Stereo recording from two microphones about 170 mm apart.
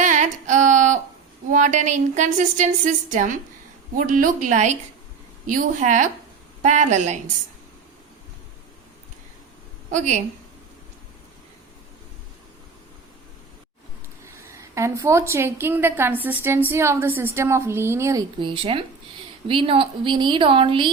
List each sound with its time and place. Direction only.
0.0 s a sound: 45° right (ahead or behind)
1.5 s a woman's voice: 45° right (ahead or behind)
9.9 s a woman's voice: 45° right (ahead or behind)
14.5 s a woman's voice: 15° right (ahead or behind)